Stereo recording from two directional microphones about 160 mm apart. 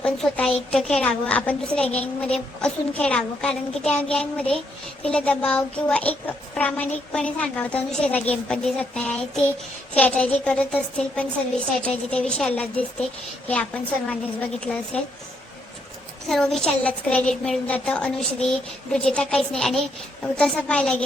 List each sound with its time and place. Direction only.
0.0 s a woman's voice: 5° left (ahead or behind)
16.3 s a woman's voice: 5° left (ahead or behind)